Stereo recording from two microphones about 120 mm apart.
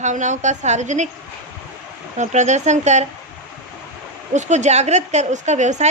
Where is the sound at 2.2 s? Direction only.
75° right (ahead or behind).